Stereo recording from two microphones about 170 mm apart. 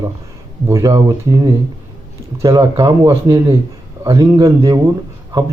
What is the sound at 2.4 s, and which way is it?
A man's voice, 20° right (ahead or behind).